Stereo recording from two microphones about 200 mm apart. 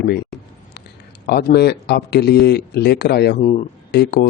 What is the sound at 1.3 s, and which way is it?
Speech, 55° left (ahead or behind).